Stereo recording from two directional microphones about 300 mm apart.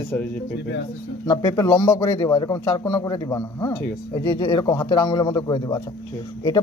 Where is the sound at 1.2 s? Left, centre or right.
Centre.